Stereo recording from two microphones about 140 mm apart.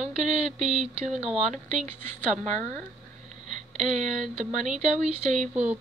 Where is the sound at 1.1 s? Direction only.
5° right (ahead or behind).